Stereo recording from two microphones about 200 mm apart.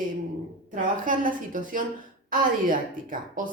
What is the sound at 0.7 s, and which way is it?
A woman's voice, 40° right (ahead or behind).